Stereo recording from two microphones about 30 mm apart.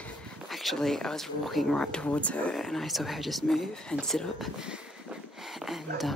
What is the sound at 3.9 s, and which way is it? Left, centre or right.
Speech, left.